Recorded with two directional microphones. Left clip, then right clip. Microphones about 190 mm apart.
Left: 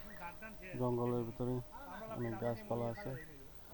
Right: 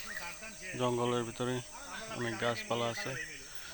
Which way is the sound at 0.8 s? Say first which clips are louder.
Right 5 dB; 35° right (ahead or behind).